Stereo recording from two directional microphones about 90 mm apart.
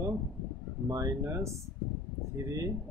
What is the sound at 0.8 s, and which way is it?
Speech, 35° right (ahead or behind).